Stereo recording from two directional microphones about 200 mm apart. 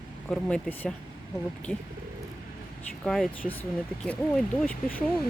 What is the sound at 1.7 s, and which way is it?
Speech, 5° right (ahead or behind).